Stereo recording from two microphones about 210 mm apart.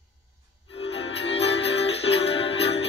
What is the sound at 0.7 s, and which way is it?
Music, 25° left (ahead or behind).